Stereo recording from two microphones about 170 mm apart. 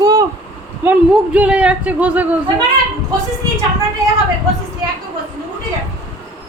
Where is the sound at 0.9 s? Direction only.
5° right (ahead or behind).